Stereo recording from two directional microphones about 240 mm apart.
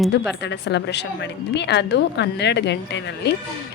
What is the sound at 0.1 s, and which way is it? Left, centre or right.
Speech, left.